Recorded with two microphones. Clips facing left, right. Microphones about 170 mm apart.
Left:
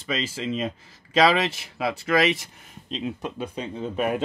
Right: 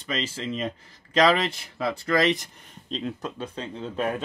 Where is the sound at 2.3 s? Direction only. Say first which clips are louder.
Right 1 dB; 5° left (ahead or behind).